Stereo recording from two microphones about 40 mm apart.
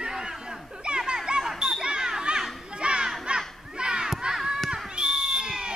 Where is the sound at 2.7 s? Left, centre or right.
Right.